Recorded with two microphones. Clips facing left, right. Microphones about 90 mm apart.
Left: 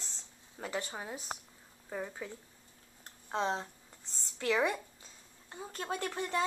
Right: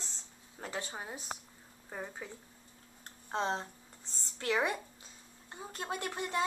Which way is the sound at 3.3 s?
30° right (ahead or behind).